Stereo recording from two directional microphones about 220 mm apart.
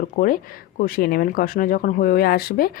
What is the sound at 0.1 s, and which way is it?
Speech, 35° left (ahead or behind).